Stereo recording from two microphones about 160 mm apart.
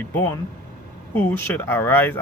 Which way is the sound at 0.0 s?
15° left (ahead or behind).